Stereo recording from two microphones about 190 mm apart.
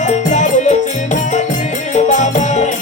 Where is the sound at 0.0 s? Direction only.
40° left (ahead or behind).